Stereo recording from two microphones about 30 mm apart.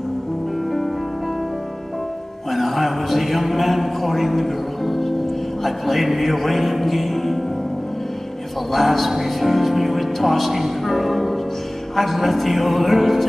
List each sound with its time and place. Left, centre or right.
2.5 s mantra: centre
5.6 s speech: centre
8.7 s speech: centre